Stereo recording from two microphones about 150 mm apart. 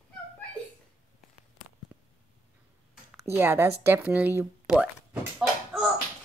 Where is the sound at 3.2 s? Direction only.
15° right (ahead or behind).